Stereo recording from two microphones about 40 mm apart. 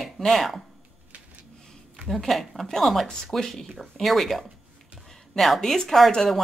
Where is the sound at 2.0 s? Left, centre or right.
Centre.